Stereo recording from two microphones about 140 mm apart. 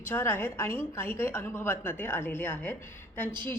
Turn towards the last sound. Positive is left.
turn(degrees=15)  # may be behind; listen again after turning